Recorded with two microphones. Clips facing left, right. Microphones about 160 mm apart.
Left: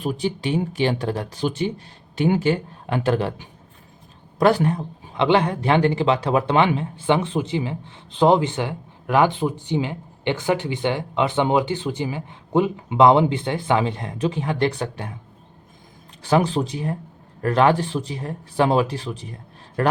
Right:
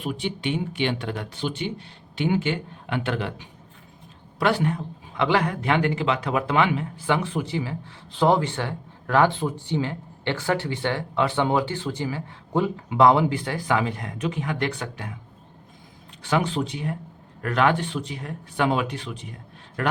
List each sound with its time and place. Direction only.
0.0 s speech: 40° left (ahead or behind)
5.1 s speech: 25° left (ahead or behind)
16.2 s a man's voice: 35° left (ahead or behind)